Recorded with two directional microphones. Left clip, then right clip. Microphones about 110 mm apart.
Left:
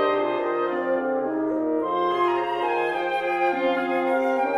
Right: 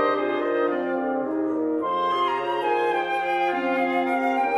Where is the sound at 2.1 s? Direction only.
40° right (ahead or behind).